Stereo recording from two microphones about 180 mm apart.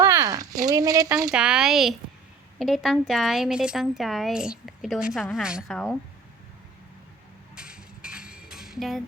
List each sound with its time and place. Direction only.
0.0 s a sound: 15° right (ahead or behind)
0.7 s speech: 20° right (ahead or behind)
1.3 s speech: 5° right (ahead or behind)
7.5 s music: 5° right (ahead or behind)